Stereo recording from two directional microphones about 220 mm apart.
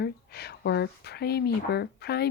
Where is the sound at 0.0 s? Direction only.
45° left (ahead or behind).